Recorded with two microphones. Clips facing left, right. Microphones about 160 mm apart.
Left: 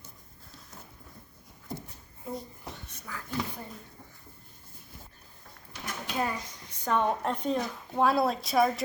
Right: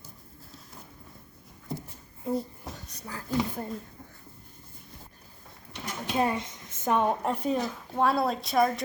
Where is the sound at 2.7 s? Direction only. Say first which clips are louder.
Right 2 dB; 35° right (ahead or behind).